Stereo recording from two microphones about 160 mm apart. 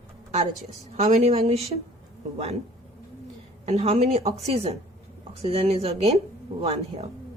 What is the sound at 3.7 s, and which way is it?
A woman's voice, 40° right (ahead or behind).